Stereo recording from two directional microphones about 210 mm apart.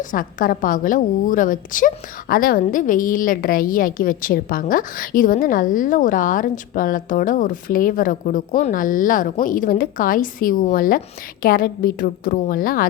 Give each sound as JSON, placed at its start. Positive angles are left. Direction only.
{"t": 0.0, "sound": "a woman's voice", "side_deg": 40}